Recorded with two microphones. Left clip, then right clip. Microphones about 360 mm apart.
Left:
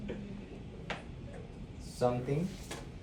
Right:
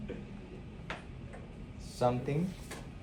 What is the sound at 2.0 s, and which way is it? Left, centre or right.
Speech, right.